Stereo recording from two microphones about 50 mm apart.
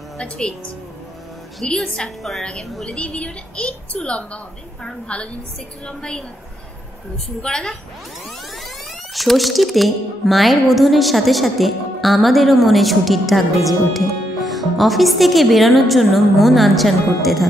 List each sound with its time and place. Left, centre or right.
0.2 s a woman's voice: left
1.6 s a woman's voice: centre
2.9 s a woman's voice: left
7.4 s a woman's voice: centre
9.1 s speech: centre